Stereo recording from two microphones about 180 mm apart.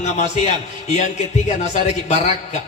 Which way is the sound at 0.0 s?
40° left (ahead or behind).